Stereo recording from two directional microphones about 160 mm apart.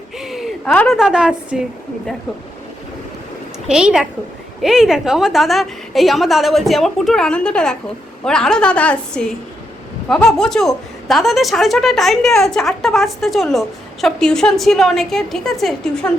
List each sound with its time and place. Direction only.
0.2 s a woman's voice: centre (ahead or behind)
3.7 s a woman's voice: 5° right (ahead or behind)